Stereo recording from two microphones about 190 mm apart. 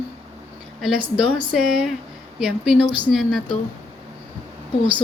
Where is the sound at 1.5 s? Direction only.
Centre (ahead or behind).